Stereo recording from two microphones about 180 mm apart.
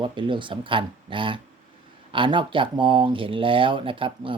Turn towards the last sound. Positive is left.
turn(degrees=-30)  # may be behind; listen again after turning